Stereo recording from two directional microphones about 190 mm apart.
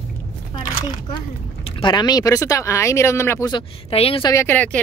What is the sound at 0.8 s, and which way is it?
Speech, 25° left (ahead or behind).